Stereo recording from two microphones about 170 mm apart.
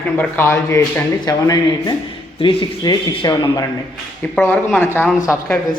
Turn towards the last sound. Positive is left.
turn(degrees=10)  # may be behind; listen again after turning